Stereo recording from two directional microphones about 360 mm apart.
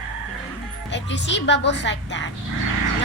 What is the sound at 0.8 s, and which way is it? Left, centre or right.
Speech, left.